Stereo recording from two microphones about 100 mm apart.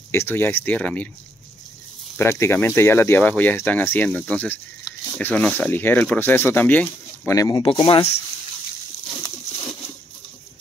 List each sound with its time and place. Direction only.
0.1 s speech: 25° left (ahead or behind)
2.1 s speech: 25° left (ahead or behind)
7.2 s speech: 35° left (ahead or behind)
7.5 s speech: 60° left (ahead or behind)